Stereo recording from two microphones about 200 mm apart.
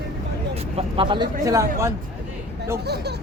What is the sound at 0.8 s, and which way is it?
Speech, 25° right (ahead or behind).